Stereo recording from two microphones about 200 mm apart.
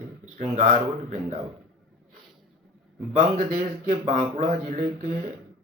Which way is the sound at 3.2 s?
40° right (ahead or behind).